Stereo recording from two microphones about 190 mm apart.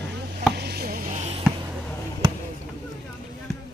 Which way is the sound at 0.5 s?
55° right (ahead or behind).